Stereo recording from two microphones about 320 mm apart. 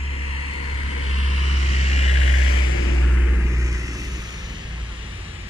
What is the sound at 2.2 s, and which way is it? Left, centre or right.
Vehicle, left.